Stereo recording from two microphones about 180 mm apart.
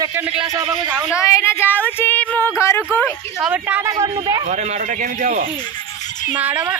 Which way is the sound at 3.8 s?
20° right (ahead or behind).